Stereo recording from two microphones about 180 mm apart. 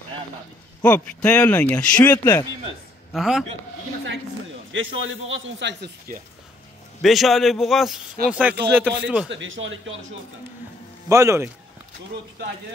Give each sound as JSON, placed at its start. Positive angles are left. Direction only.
{"t": 0.8, "sound": "a man's voice", "side_deg": 5}
{"t": 4.7, "sound": "a man's voice", "side_deg": -90}
{"t": 7.0, "sound": "a man's voice", "side_deg": 0}
{"t": 9.3, "sound": "a man's voice", "side_deg": -90}
{"t": 11.1, "sound": "a man's voice", "side_deg": -15}